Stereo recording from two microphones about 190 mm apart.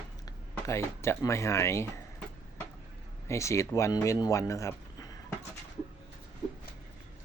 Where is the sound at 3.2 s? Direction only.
15° left (ahead or behind).